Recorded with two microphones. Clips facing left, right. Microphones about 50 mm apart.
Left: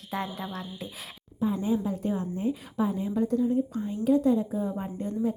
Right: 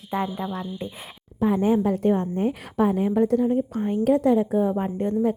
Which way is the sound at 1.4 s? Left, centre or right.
Right.